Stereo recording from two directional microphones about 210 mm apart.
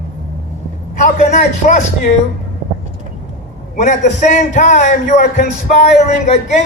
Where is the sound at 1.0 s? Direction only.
35° left (ahead or behind).